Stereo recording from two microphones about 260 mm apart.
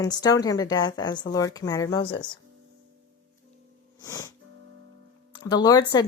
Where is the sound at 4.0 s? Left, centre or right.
Centre.